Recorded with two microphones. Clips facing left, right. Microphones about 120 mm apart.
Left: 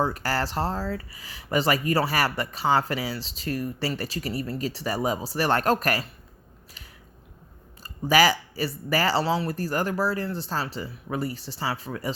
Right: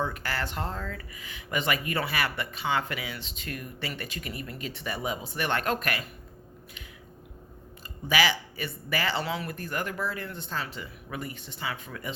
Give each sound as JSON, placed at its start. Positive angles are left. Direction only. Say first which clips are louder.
{"t": 0.0, "sound": "speech", "louder": "left 6 dB", "side_deg": 35}
{"t": 8.0, "sound": "speech", "louder": "left 6 dB", "side_deg": 40}